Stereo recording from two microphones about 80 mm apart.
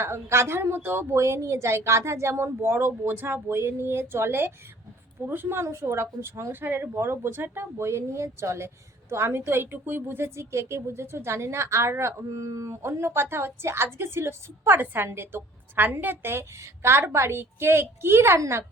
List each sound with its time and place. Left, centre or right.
0.0 s speech: right